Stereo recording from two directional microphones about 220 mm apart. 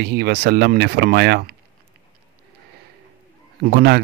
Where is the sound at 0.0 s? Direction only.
45° right (ahead or behind).